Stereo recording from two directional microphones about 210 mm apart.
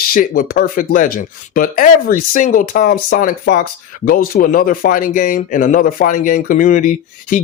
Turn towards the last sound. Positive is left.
turn(degrees=40)  # may be behind; listen again after turning